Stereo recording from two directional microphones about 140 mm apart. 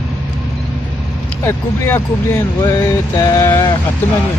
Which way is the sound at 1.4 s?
20° left (ahead or behind).